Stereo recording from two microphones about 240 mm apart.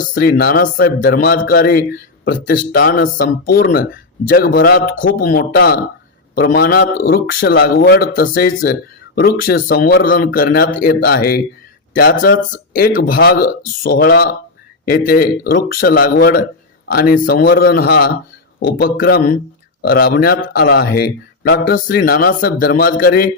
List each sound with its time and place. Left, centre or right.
0.1 s a man's voice: left